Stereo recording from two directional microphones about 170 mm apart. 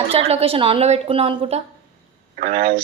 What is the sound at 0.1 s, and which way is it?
A woman's voice, 35° right (ahead or behind).